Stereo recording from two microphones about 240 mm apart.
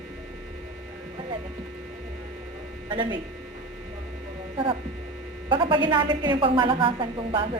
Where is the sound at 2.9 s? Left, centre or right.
Centre.